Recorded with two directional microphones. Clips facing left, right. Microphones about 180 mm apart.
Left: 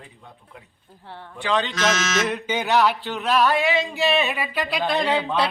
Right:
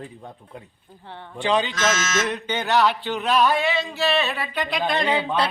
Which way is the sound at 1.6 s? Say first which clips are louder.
Left 1 dB; centre (ahead or behind).